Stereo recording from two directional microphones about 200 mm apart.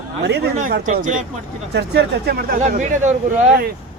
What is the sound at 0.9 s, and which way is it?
Speech, 40° right (ahead or behind).